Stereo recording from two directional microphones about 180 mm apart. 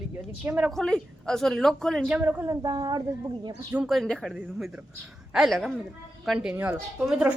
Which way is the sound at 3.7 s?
5° right (ahead or behind).